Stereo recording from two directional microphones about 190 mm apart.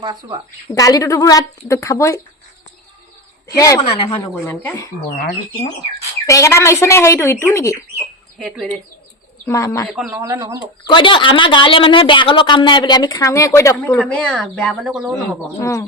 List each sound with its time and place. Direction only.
0.0 s speech: 20° right (ahead or behind)
0.7 s speech: 20° left (ahead or behind)
3.6 s speech: 20° left (ahead or behind)
6.2 s speech: 15° left (ahead or behind)
8.4 s speech: centre (ahead or behind)
9.5 s speech: 15° left (ahead or behind)
9.8 s speech: centre (ahead or behind)
10.1 s speech: 15° right (ahead or behind)
10.8 s a woman's voice: 25° left (ahead or behind); by 15.1 s centre (ahead or behind)
15.5 s speech: 15° left (ahead or behind)